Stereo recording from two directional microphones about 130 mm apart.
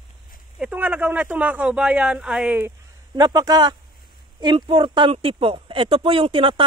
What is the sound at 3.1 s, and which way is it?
A man's voice, 30° right (ahead or behind).